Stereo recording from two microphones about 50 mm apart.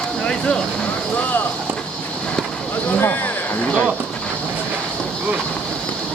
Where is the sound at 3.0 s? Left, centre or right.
Left.